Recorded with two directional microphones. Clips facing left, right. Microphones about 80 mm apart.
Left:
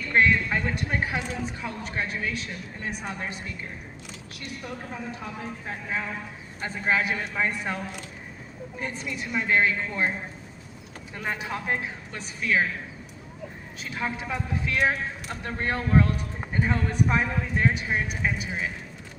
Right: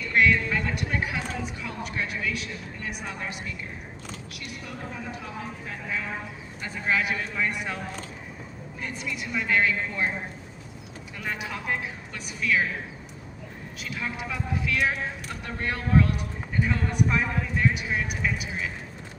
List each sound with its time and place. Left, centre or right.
0.1 s speech: left
6.6 s speech: left
8.8 s speech: left
11.1 s speech: left
13.7 s speech: left